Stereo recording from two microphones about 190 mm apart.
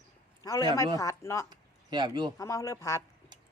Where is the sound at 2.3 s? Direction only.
15° left (ahead or behind).